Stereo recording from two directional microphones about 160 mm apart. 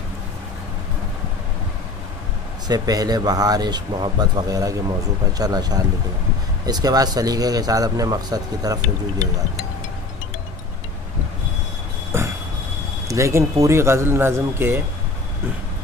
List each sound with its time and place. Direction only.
2.7 s speech: 25° right (ahead or behind)
12.1 s train: 15° right (ahead or behind)
13.1 s speech: 20° right (ahead or behind)